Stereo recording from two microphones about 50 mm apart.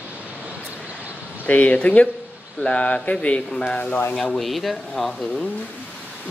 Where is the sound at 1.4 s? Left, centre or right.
Left; by 4.4 s centre.